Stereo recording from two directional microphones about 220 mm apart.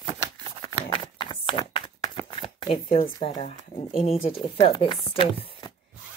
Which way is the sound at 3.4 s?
25° left (ahead or behind).